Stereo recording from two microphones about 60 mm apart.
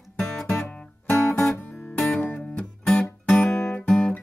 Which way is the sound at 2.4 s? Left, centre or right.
Centre.